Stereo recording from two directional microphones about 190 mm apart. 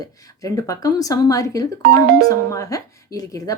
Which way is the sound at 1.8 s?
55° right (ahead or behind).